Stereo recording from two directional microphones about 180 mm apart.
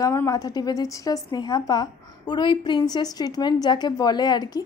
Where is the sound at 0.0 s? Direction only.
20° left (ahead or behind).